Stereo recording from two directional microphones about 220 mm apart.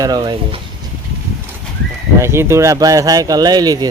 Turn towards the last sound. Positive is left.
turn(degrees=-15)  # may be behind; listen again after turning